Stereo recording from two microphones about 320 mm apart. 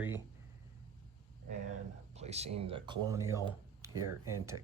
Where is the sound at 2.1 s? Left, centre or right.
Centre.